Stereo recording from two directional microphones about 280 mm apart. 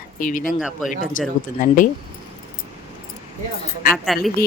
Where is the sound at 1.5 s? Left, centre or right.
Left.